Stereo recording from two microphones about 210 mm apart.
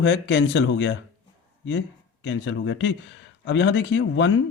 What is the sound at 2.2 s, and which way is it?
Speech, 60° left (ahead or behind).